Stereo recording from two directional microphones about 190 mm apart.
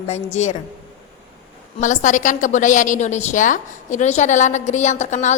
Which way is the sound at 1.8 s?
40° left (ahead or behind).